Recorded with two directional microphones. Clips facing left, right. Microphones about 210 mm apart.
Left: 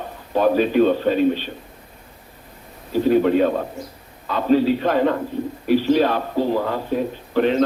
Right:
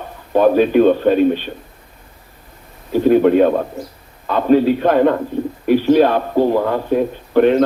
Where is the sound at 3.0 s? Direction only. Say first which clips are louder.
Right 5 dB; 55° right (ahead or behind).